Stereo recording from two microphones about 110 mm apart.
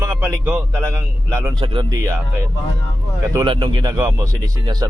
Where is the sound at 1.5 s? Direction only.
45° right (ahead or behind).